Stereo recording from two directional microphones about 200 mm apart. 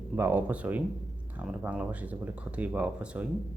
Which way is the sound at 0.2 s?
10° right (ahead or behind).